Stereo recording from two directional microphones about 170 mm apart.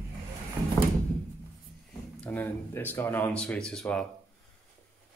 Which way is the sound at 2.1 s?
10° left (ahead or behind).